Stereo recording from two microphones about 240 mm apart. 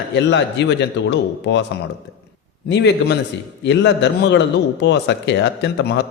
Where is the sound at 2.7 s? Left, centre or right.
Left.